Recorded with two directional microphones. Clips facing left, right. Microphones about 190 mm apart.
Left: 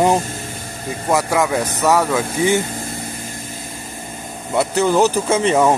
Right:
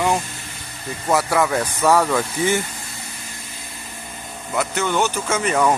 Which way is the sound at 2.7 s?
50° left (ahead or behind).